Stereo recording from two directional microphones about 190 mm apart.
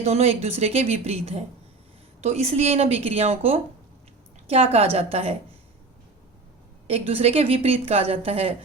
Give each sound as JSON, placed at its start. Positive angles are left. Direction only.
{"t": 0.0, "sound": "a woman's voice", "side_deg": -35}
{"t": 6.8, "sound": "a woman's voice", "side_deg": -30}